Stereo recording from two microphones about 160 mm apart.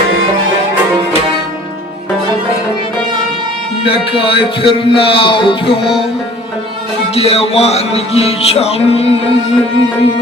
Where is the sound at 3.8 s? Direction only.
35° left (ahead or behind).